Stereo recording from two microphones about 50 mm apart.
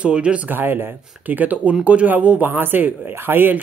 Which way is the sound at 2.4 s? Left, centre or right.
Right.